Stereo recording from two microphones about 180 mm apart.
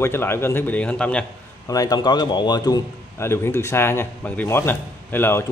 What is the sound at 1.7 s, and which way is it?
Speech, 20° left (ahead or behind).